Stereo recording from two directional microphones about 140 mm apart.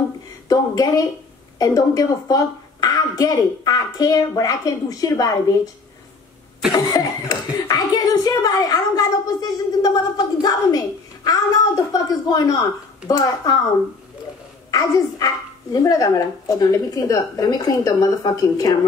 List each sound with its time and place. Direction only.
0.5 s a woman's voice: 25° left (ahead or behind)
6.7 s a sound: 25° left (ahead or behind)
11.2 s a woman's voice: 25° left (ahead or behind)
14.7 s a woman's voice: 25° left (ahead or behind)